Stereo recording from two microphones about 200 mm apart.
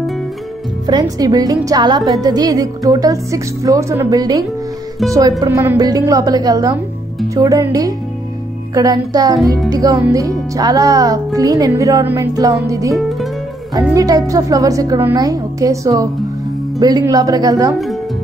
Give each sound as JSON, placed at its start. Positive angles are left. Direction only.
{"t": 0.8, "sound": "music", "side_deg": -20}
{"t": 13.9, "sound": "music", "side_deg": -15}